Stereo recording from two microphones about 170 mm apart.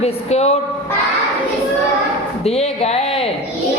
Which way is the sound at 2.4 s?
35° left (ahead or behind).